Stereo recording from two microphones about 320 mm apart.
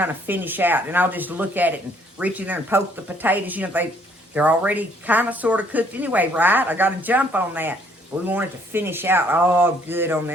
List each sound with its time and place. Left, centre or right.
0.0 s a woman's voice: centre